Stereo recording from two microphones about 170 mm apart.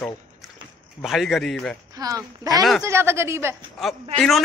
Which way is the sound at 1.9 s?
20° right (ahead or behind).